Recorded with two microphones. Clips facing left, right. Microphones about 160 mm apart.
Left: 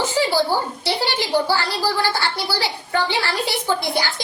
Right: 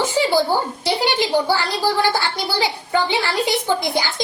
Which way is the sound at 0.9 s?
15° right (ahead or behind).